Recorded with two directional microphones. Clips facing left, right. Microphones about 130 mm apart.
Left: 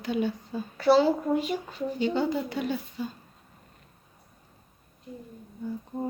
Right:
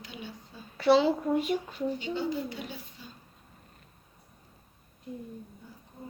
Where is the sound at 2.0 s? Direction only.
65° left (ahead or behind).